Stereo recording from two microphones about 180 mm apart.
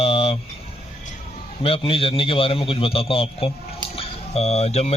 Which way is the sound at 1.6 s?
30° left (ahead or behind).